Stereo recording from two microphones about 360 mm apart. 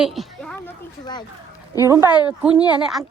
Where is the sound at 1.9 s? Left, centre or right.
Centre.